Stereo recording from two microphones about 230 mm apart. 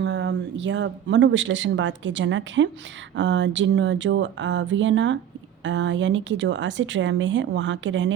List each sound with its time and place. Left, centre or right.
0.0 s speech: right